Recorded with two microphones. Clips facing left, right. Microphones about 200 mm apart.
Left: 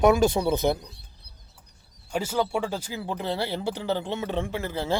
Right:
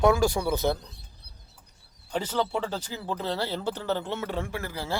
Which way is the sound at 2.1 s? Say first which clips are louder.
Left 2 dB; 10° left (ahead or behind).